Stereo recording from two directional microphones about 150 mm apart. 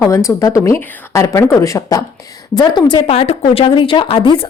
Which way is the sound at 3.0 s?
40° left (ahead or behind).